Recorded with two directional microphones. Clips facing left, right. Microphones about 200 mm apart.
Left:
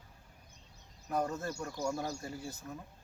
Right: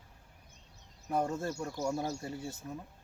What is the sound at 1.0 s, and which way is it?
Speech, 25° right (ahead or behind).